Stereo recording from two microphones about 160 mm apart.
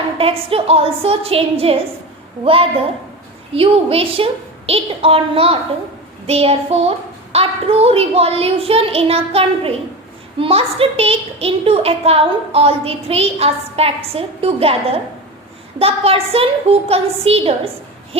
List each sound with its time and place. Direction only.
0.2 s a woman's voice: 35° right (ahead or behind)